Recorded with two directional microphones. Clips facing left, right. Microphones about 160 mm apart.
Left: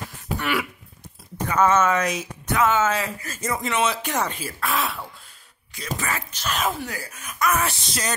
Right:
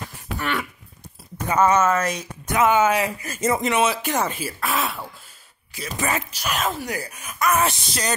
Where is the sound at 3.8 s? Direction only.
5° right (ahead or behind).